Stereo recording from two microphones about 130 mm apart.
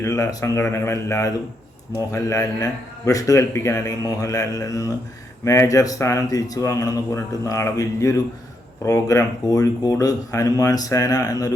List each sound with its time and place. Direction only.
0.0 s a man's voice: 25° left (ahead or behind)